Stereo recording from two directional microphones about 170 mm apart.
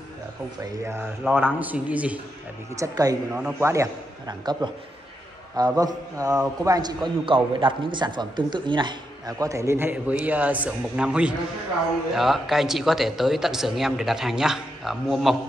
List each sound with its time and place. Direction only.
0.8 s a man's voice: 15° right (ahead or behind)
2.7 s a man's voice: 20° right (ahead or behind)
5.8 s a man's voice: 20° right (ahead or behind); by 15.3 s centre (ahead or behind)